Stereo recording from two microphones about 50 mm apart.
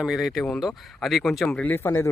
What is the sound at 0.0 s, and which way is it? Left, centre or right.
Speech, centre.